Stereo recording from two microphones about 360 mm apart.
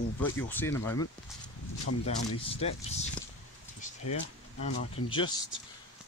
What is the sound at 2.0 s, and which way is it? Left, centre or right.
Speech, centre.